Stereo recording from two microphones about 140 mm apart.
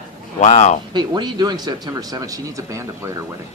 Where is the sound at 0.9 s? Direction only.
30° right (ahead or behind).